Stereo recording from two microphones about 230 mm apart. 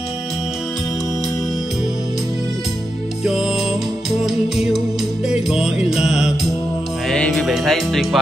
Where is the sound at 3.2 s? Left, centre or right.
Centre.